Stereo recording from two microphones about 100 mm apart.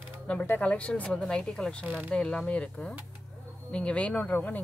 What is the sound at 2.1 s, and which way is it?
Speech, 10° left (ahead or behind).